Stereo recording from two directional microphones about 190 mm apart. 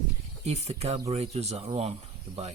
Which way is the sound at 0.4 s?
35° right (ahead or behind).